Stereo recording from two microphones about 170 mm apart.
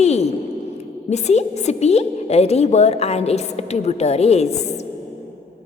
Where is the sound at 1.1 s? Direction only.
40° left (ahead or behind).